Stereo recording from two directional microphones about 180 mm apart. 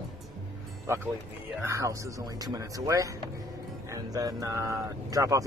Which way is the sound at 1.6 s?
15° right (ahead or behind).